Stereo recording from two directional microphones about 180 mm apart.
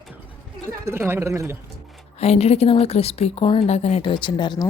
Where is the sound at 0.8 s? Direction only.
15° right (ahead or behind).